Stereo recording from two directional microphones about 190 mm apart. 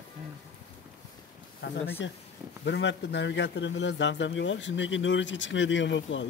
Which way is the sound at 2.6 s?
70° left (ahead or behind).